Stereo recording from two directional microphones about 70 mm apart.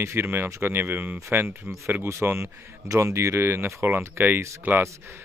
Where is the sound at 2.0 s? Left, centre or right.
Right.